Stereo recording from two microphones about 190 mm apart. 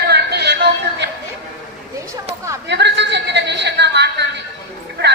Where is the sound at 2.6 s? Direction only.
65° right (ahead or behind).